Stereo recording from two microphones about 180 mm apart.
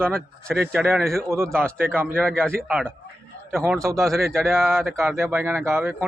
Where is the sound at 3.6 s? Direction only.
15° right (ahead or behind).